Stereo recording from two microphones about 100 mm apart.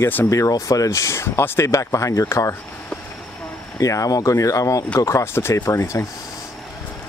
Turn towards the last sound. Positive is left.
turn(degrees=30)  # may be behind; listen again after turning